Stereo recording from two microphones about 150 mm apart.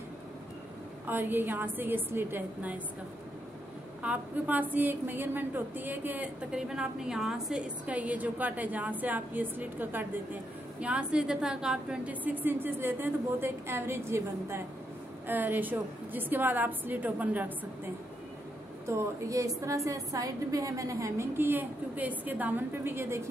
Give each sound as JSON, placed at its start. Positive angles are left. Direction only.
{"t": 1.0, "sound": "a woman's voice", "side_deg": -15}
{"t": 4.0, "sound": "a woman's voice", "side_deg": -10}
{"t": 18.9, "sound": "a woman's voice", "side_deg": -20}